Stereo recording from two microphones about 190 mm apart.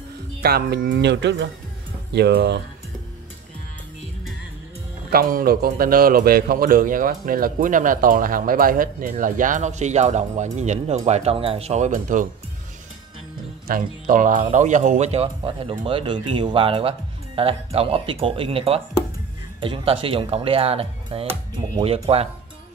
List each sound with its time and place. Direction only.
0.4 s speech: 55° right (ahead or behind)
5.1 s a man's voice: 50° right (ahead or behind)
13.7 s speech: 45° right (ahead or behind)